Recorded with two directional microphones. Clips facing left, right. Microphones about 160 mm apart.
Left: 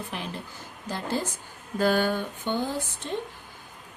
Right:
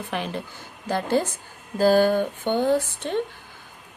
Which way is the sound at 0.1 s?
70° right (ahead or behind).